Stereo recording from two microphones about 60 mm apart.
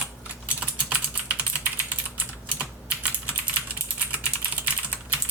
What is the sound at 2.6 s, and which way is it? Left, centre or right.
Typing, centre.